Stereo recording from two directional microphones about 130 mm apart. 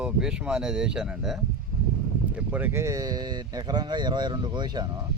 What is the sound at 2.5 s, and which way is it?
Speech, 15° right (ahead or behind).